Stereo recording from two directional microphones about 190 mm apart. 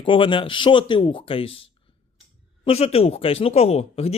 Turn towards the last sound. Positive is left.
turn(degrees=35)  # may be behind; listen again after turning